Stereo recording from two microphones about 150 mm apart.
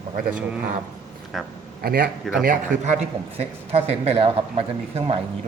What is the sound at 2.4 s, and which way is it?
Speech, 60° right (ahead or behind).